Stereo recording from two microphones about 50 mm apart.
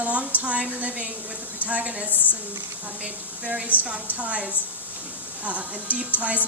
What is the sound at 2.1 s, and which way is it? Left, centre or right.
Speech, left.